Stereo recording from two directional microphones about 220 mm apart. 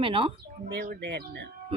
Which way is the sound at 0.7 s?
45° right (ahead or behind).